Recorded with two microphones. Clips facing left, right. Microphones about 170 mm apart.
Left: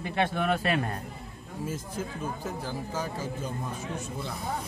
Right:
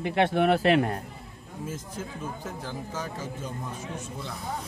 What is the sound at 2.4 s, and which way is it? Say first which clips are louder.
Speech: left 2 dB; 10° left (ahead or behind).